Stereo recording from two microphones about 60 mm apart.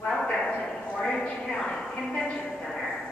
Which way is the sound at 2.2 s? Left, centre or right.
Left.